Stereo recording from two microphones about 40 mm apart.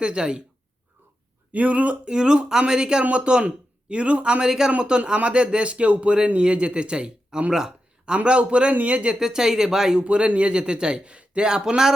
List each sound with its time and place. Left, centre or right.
0.0 s a man's voice: right
1.5 s speech: right
2.0 s a man's voice: right
4.4 s a man's voice: centre
8.7 s speech: right
9.1 s speech: centre
10.0 s a man's voice: right